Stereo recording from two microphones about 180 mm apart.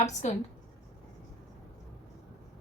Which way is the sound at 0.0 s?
40° left (ahead or behind).